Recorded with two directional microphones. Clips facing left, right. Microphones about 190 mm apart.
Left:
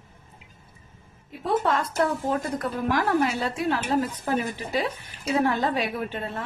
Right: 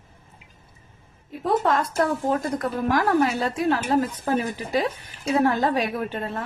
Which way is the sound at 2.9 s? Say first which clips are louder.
Right 3 dB; 45° right (ahead or behind).